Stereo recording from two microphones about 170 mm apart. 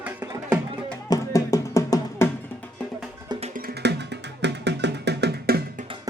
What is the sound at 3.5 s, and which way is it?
Music, 70° right (ahead or behind).